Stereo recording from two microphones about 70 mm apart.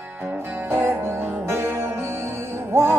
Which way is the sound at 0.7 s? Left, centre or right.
Right.